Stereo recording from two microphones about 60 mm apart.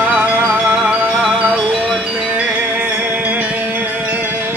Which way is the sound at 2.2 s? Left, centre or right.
Right.